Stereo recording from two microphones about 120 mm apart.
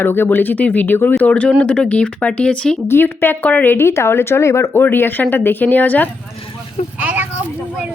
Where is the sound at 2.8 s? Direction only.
20° left (ahead or behind).